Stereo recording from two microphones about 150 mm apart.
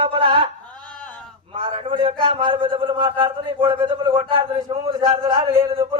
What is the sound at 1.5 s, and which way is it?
A man's voice, 40° right (ahead or behind).